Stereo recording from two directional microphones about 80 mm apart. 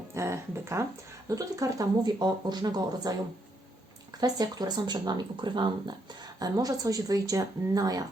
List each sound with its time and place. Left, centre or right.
0.1 s speech: right
2.0 s speech: right
4.2 s speech: right
6.1 s speech: right